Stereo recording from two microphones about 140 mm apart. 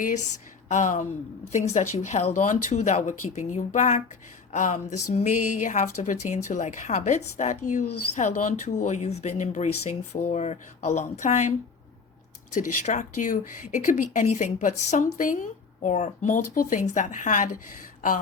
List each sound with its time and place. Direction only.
0.7 s speech: 60° left (ahead or behind)